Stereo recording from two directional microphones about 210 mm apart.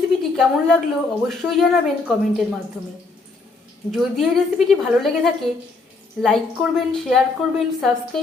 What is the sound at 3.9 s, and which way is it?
A woman's voice, centre (ahead or behind).